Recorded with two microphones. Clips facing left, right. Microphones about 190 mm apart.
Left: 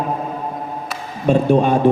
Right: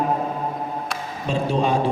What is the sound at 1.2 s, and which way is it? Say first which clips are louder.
Speech: left 8 dB; 55° left (ahead or behind).